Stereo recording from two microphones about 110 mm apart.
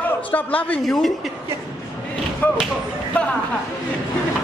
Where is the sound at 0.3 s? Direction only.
15° left (ahead or behind).